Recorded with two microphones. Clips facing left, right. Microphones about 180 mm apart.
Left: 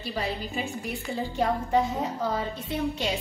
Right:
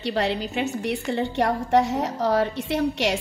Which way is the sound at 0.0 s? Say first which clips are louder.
Right 7 dB; 75° right (ahead or behind).